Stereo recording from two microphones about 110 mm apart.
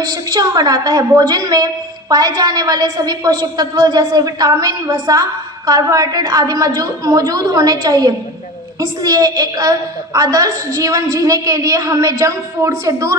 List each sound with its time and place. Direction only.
0.0 s a woman's voice: 35° right (ahead or behind)